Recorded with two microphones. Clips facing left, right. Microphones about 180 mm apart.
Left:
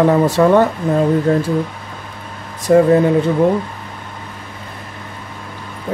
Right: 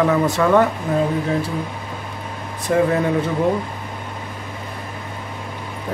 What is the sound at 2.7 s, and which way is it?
Speech, 40° left (ahead or behind).